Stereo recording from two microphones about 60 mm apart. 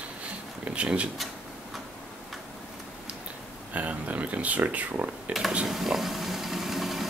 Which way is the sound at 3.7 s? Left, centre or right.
Right.